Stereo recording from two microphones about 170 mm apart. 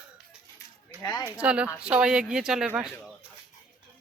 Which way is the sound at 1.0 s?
20° left (ahead or behind).